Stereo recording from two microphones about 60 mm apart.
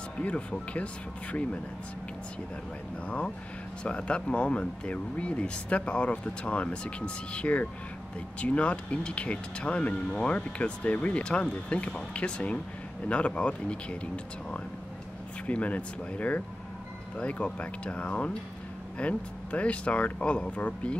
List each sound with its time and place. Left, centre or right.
0.2 s speech: left
3.1 s speech: centre